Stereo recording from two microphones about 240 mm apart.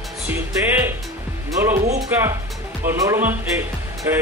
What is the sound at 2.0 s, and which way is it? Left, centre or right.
Speech, centre.